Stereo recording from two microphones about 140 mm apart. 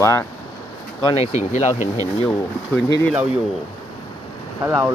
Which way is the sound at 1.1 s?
50° left (ahead or behind).